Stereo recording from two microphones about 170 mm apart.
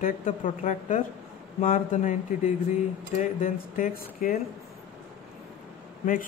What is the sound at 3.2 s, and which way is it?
A man's voice, 55° left (ahead or behind).